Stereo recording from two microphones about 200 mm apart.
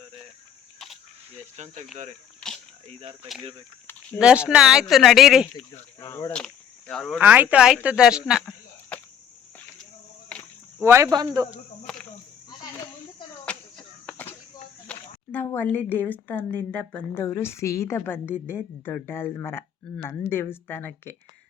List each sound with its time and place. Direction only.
1.3 s speech: 35° right (ahead or behind)
4.2 s speech: 5° right (ahead or behind)
6.0 s speech: 15° left (ahead or behind)
7.2 s speech: 10° right (ahead or behind)
10.8 s speech: 10° right (ahead or behind)
11.9 s snake: 5° left (ahead or behind)
12.5 s a sound: 20° left (ahead or behind)
13.4 s a sound: 5° left (ahead or behind)
14.8 s a woman's voice: 10° left (ahead or behind)